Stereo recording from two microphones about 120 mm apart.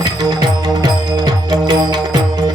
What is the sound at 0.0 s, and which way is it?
Music, 35° right (ahead or behind).